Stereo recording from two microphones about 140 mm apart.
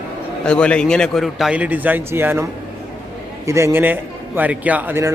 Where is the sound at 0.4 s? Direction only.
5° left (ahead or behind).